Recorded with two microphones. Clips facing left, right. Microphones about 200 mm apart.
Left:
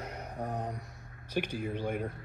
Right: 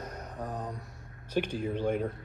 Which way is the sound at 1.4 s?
10° left (ahead or behind).